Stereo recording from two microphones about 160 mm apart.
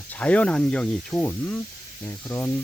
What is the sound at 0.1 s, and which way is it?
Speech, 10° left (ahead or behind).